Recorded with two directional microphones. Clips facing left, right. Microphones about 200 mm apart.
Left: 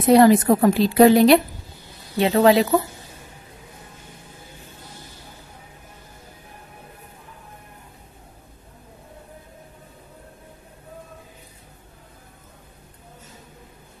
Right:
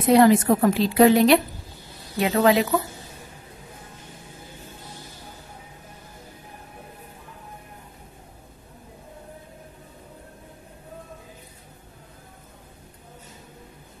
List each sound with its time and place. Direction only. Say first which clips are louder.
0.1 s a woman's voice: left 2 dB; 35° left (ahead or behind)